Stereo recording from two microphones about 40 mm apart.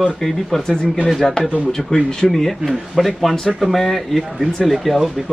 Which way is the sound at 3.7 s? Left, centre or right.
Centre.